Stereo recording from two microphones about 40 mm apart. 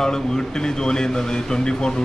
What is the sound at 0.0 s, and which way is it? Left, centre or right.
Speech, centre.